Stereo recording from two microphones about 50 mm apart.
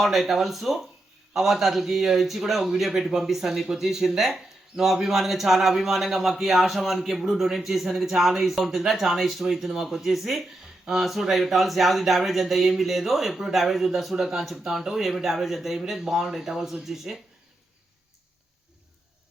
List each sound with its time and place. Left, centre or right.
0.0 s a man's voice: centre